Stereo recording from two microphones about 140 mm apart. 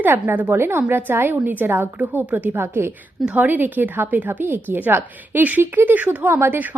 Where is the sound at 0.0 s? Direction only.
15° right (ahead or behind).